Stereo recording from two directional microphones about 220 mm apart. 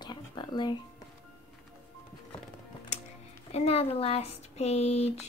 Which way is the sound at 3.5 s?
25° left (ahead or behind).